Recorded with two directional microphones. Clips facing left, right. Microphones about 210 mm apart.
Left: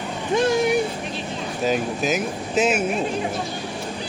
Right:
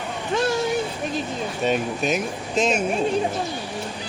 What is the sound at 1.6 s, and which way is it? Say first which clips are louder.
Speech: left 1 dB; centre (ahead or behind).